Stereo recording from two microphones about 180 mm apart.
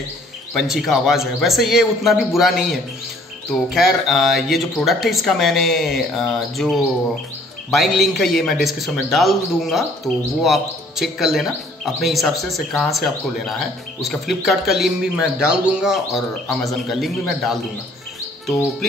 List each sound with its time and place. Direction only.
0.6 s speech: centre (ahead or behind)